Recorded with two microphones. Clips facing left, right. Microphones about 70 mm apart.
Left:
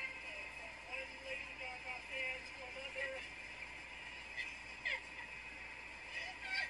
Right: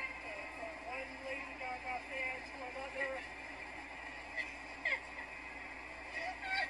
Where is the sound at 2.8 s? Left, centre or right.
Right.